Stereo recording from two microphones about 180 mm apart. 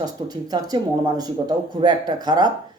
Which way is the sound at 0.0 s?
20° right (ahead or behind).